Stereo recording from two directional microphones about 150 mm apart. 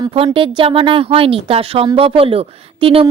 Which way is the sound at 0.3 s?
35° right (ahead or behind).